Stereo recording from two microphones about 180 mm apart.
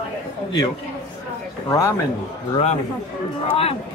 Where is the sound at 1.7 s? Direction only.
15° left (ahead or behind).